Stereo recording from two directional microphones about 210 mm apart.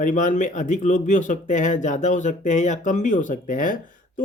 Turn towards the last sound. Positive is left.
turn(degrees=40)  # may be behind; listen again after turning